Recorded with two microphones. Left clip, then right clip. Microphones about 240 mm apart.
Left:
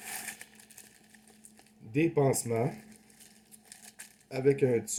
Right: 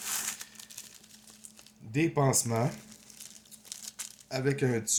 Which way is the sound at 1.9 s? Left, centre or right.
Right.